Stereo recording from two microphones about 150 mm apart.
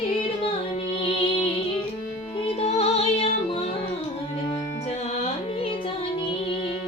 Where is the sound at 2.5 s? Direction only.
45° left (ahead or behind).